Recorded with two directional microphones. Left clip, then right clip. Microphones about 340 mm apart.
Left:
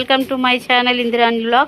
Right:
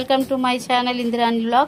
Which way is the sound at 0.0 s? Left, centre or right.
Centre.